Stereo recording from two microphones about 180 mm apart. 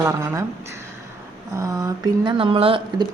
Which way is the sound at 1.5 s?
20° right (ahead or behind).